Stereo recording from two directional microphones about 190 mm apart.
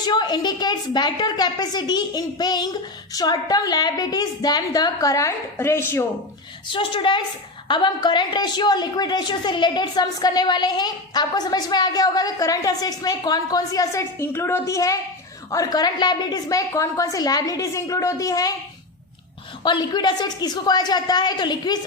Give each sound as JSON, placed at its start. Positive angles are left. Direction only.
{"t": 0.0, "sound": "a woman's voice", "side_deg": 20}
{"t": 6.7, "sound": "a woman's voice", "side_deg": 25}
{"t": 19.6, "sound": "a woman's voice", "side_deg": 25}